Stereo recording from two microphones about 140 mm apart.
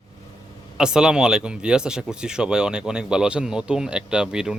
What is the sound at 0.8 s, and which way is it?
Speech, 5° right (ahead or behind).